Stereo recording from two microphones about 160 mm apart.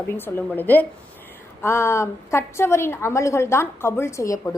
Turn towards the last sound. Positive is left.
turn(degrees=20)  # may be behind; listen again after turning